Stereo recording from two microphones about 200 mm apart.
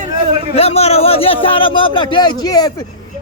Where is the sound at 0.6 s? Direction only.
30° left (ahead or behind).